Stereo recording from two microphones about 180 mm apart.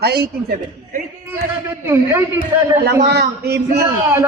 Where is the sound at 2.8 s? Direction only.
65° right (ahead or behind).